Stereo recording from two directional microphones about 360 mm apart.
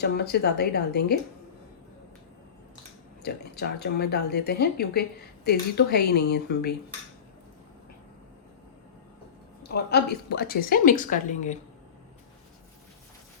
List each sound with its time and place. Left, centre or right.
0.0 s a woman's voice: left
3.2 s a woman's voice: left
9.6 s a woman's voice: left